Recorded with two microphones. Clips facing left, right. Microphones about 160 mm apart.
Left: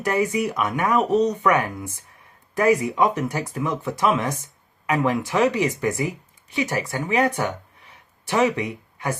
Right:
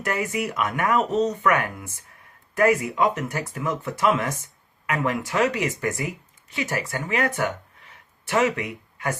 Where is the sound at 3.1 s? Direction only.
35° left (ahead or behind).